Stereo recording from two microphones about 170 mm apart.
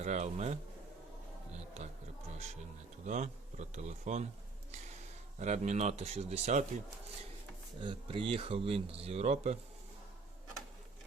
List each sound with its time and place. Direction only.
0.0 s speech: 45° right (ahead or behind)
3.1 s speech: 45° right (ahead or behind)
5.4 s speech: 40° right (ahead or behind)
7.8 s speech: 30° right (ahead or behind)